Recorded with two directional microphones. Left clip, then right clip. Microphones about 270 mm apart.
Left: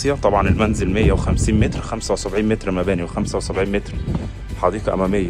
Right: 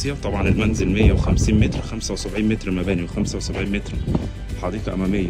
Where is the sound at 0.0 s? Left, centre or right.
Centre.